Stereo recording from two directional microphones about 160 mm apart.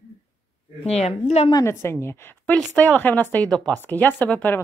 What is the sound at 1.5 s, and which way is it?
A woman's voice, 20° left (ahead or behind).